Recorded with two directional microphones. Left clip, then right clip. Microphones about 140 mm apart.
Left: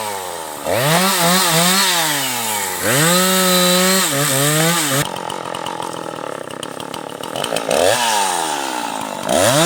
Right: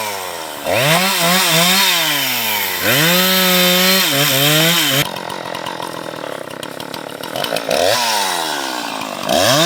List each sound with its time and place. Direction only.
0.7 s chainsaw: 20° left (ahead or behind)
7.3 s chainsaw: 50° left (ahead or behind)